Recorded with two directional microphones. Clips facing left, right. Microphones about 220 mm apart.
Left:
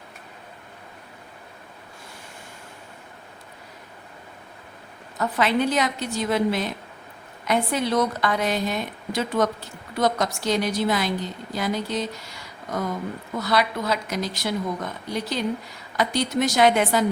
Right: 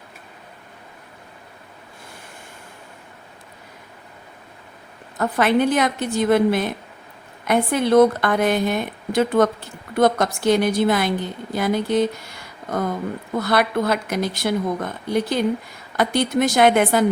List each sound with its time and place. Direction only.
5.1 s a woman's voice: 55° right (ahead or behind)